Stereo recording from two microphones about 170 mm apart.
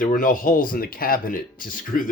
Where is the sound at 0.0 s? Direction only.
55° left (ahead or behind).